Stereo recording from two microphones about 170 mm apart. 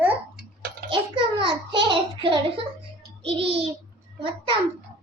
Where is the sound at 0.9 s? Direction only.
30° right (ahead or behind).